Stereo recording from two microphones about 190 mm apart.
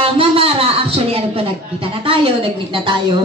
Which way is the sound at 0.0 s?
30° right (ahead or behind).